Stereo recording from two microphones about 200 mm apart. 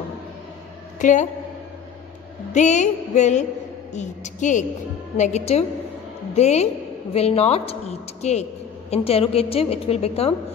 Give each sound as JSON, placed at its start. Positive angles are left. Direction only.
{"t": 0.9, "sound": "a woman's voice", "side_deg": 40}
{"t": 2.5, "sound": "a sound", "side_deg": 35}
{"t": 8.9, "sound": "a woman's voice", "side_deg": 30}